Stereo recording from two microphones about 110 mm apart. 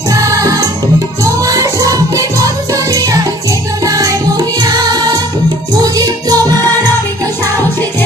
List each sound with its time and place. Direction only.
0.1 s music: 30° right (ahead or behind)